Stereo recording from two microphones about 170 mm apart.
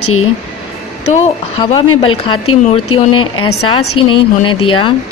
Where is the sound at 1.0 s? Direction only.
35° left (ahead or behind).